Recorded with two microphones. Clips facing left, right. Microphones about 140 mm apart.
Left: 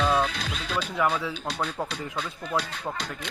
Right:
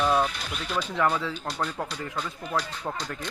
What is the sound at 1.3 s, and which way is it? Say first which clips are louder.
Speech: even; 70° left (ahead or behind).